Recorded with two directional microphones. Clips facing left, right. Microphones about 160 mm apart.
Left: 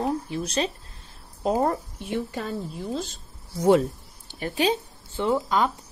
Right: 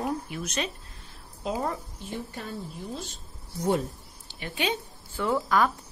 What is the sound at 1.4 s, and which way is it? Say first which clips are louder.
Speech: left 7 dB; 45° left (ahead or behind).